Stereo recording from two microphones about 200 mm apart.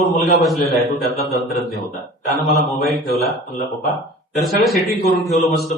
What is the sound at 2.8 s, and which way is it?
Speech, 50° left (ahead or behind).